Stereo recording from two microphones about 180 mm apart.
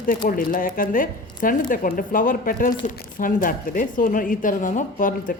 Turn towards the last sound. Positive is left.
turn(degrees=45)  # may be behind; listen again after turning